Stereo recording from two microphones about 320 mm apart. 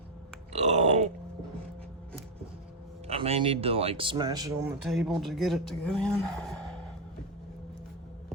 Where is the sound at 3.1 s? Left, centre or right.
Centre.